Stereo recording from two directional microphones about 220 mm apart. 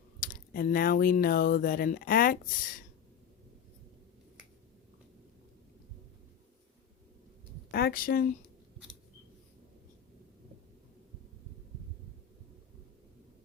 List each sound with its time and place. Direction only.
0.2 s speech: 40° left (ahead or behind)
7.7 s speech: 45° left (ahead or behind)